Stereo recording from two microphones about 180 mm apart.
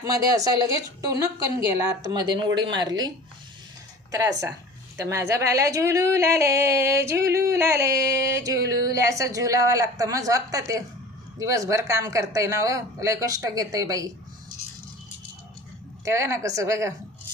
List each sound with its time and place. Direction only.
0.0 s a woman's voice: 20° right (ahead or behind)
4.1 s a woman's voice: 20° right (ahead or behind)
16.0 s a woman's voice: 15° right (ahead or behind)